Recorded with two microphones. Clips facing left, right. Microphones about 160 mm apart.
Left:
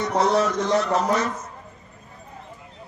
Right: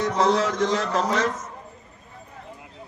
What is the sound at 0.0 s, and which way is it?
A man's voice, 90° right.